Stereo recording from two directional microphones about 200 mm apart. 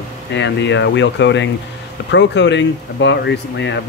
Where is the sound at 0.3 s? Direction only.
65° left (ahead or behind).